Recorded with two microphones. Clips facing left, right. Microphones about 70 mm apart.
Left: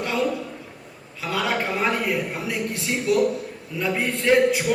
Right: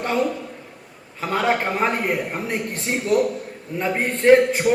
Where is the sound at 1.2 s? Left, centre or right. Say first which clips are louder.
Right 4 dB; right.